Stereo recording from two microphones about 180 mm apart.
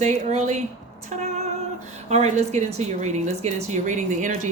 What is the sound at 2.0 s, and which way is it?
A woman's voice, 35° right (ahead or behind).